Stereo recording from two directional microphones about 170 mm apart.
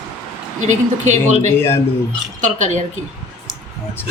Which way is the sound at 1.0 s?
45° right (ahead or behind).